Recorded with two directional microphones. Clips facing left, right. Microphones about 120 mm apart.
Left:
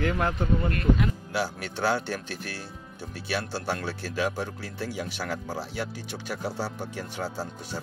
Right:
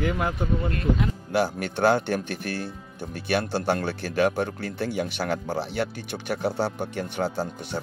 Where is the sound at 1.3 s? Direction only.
55° right (ahead or behind).